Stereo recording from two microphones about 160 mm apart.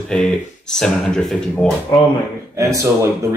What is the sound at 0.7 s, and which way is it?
Speech, 5° left (ahead or behind).